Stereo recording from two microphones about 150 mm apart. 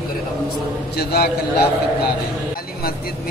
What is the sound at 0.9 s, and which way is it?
Speech, 90° left.